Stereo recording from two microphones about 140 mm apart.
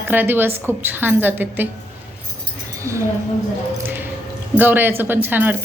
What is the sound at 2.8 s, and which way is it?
Speech, 20° right (ahead or behind).